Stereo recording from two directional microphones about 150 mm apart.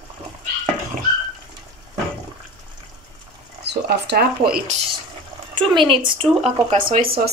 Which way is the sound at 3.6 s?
90° right.